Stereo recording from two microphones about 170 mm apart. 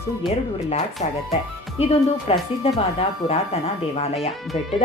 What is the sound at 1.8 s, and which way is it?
Speech, 40° left (ahead or behind).